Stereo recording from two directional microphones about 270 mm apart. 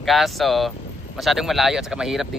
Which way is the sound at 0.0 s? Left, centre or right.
Centre.